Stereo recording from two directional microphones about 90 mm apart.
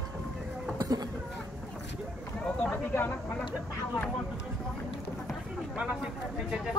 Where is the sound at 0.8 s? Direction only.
45° right (ahead or behind).